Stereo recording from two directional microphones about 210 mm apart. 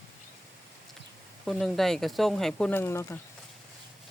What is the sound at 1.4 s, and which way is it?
Speech, centre (ahead or behind).